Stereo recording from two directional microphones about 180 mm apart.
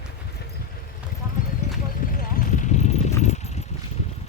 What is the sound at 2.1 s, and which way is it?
Clip-clop, 50° left (ahead or behind).